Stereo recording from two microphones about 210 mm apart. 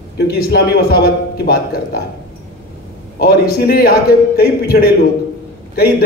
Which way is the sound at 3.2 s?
45° left (ahead or behind).